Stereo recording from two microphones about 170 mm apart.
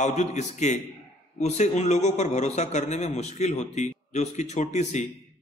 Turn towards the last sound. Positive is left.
turn(degrees=45)  # may be behind; listen again after turning